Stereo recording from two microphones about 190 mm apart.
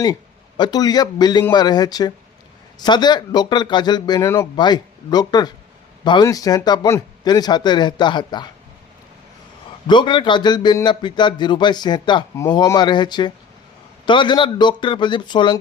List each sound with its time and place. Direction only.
0.0 s a man's voice: 20° left (ahead or behind)
9.8 s a man's voice: 25° left (ahead or behind)